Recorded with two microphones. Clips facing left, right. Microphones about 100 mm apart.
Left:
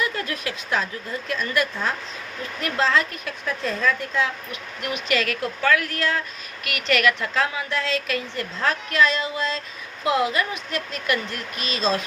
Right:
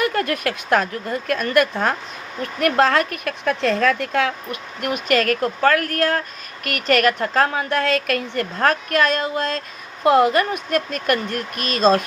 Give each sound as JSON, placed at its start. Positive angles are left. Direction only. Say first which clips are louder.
{"t": 0.0, "sound": "a woman's voice", "louder": "right 6 dB", "side_deg": -55}
{"t": 4.8, "sound": "a woman's voice", "louder": "right 5 dB", "side_deg": -50}